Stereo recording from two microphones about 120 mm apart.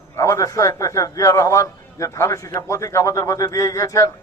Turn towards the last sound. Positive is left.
turn(degrees=25)  # may be behind; listen again after turning